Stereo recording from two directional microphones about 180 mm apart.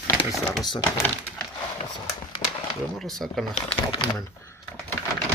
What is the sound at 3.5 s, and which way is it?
Speech, 30° left (ahead or behind).